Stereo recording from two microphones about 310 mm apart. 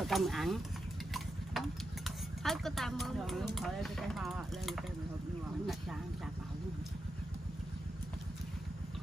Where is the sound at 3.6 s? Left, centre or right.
Centre.